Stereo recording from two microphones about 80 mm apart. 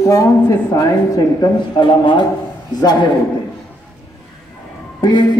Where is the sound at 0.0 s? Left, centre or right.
Left.